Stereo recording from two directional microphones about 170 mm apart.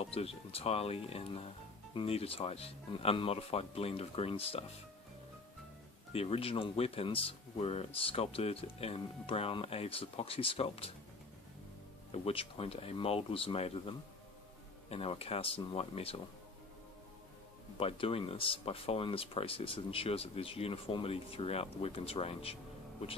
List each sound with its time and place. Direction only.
0.0 s speech: 35° left (ahead or behind)
6.1 s speech: 35° left (ahead or behind)
12.1 s speech: 35° left (ahead or behind)
17.7 s speech: 35° left (ahead or behind)